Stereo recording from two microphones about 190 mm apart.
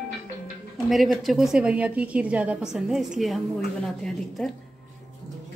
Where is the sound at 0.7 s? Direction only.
Centre (ahead or behind).